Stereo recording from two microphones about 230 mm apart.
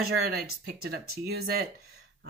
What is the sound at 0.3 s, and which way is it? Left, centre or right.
Speech, right.